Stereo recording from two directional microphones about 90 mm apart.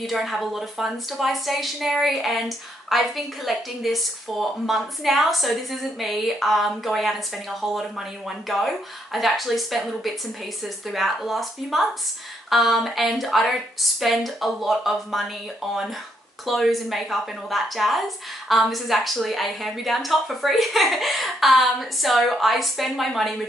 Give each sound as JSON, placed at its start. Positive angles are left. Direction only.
{"t": 0.0, "sound": "a woman's voice", "side_deg": 0}
{"t": 8.3, "sound": "a woman's voice", "side_deg": 0}